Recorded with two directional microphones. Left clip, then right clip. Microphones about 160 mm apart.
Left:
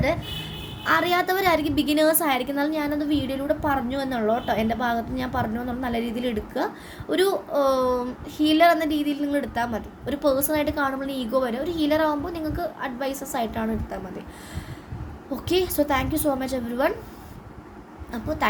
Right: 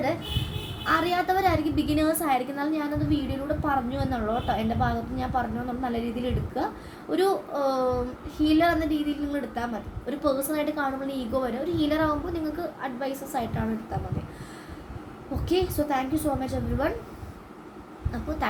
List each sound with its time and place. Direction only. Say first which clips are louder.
0.9 s a child's voice: left 3 dB; 55° left (ahead or behind)
15.4 s a child's voice: left 3 dB; 60° left (ahead or behind)